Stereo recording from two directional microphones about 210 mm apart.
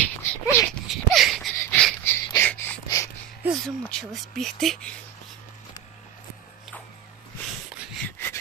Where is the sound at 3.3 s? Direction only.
Centre (ahead or behind).